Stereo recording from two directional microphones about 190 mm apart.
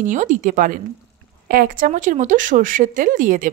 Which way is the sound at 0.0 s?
40° right (ahead or behind).